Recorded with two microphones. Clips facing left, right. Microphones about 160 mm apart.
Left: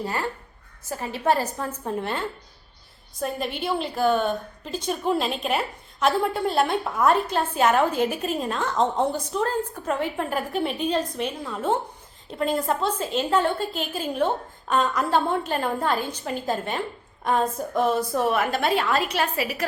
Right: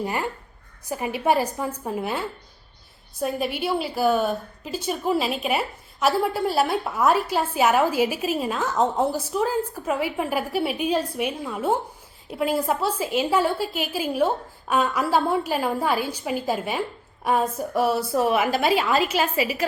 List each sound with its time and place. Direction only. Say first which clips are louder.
0.0 s a woman's voice: right 1 dB; 15° right (ahead or behind)